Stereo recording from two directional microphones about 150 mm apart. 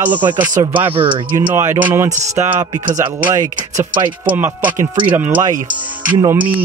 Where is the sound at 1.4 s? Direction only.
15° right (ahead or behind).